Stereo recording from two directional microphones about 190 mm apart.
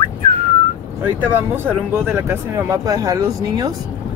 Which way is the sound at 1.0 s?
10° right (ahead or behind).